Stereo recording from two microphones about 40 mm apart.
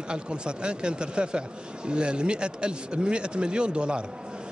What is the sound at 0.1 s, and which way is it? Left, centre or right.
Speech, right.